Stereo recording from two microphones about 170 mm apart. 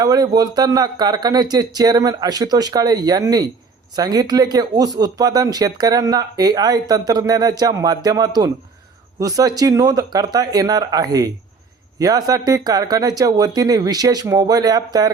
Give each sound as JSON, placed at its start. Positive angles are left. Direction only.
{"t": 0.0, "sound": "speech", "side_deg": -20}